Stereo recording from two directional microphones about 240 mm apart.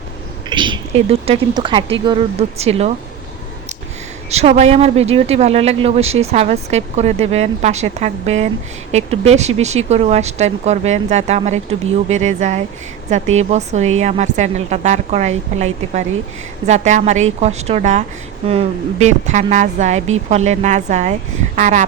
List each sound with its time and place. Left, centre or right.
0.5 s speech: centre
4.3 s speech: right